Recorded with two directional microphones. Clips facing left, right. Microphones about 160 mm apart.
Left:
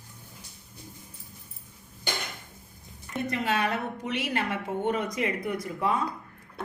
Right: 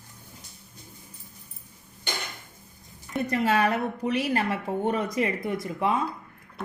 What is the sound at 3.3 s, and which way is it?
Speech, 40° right (ahead or behind).